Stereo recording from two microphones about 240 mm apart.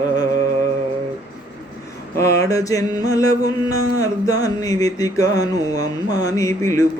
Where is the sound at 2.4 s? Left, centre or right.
Centre.